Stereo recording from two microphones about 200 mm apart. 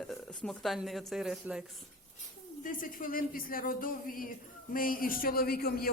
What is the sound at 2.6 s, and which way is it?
Speech, 40° left (ahead or behind).